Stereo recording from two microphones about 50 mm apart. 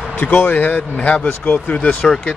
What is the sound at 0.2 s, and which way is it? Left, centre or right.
Speech, left.